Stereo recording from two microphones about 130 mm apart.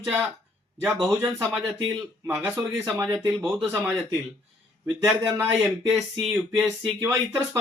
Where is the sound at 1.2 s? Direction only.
5° right (ahead or behind).